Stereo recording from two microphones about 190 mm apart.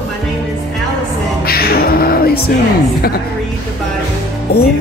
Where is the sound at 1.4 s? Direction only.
55° left (ahead or behind).